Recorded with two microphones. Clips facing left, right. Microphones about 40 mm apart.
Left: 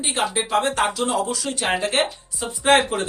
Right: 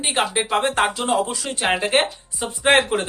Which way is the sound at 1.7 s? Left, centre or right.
Centre.